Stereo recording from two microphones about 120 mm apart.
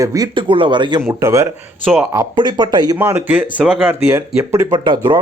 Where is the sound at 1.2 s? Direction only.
25° right (ahead or behind).